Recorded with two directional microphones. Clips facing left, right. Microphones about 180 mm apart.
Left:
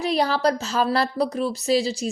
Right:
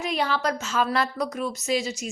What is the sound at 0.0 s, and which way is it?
Speech, 35° left (ahead or behind).